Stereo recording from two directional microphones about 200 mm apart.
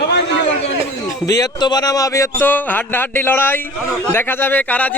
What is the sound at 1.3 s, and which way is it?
Speech, 20° left (ahead or behind).